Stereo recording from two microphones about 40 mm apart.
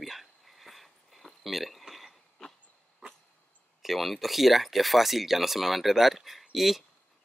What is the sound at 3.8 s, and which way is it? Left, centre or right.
Speech, centre.